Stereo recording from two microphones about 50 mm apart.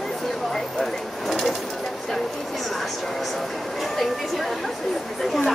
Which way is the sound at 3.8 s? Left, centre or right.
Centre.